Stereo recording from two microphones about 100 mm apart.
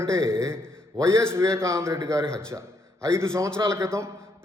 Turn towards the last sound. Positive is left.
turn(degrees=-30)  # may be behind; listen again after turning